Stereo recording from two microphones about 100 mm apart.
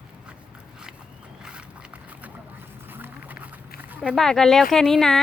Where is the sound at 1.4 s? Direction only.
10° right (ahead or behind).